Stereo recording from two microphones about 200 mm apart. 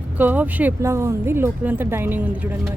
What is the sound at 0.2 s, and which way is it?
Speech, 10° right (ahead or behind).